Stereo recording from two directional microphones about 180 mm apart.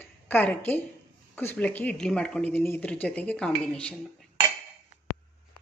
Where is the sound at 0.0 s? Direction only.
10° left (ahead or behind).